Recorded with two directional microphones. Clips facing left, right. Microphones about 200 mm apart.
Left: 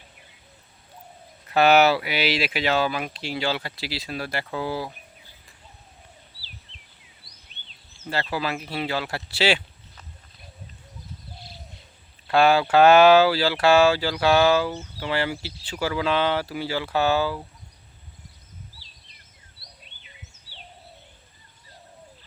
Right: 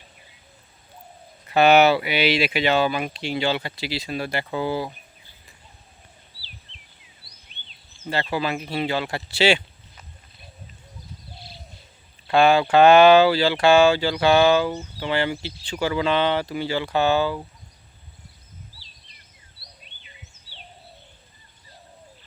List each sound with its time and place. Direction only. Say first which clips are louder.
1.5 s speech: right 2 dB; centre (ahead or behind)
7.5 s a sound: right 2 dB; 40° left (ahead or behind)
8.1 s speech: right 2 dB; centre (ahead or behind)
12.3 s speech: right 1 dB; 5° left (ahead or behind)